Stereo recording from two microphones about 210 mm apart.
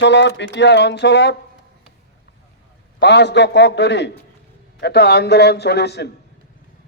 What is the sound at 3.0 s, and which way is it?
A man's voice, 55° left (ahead or behind).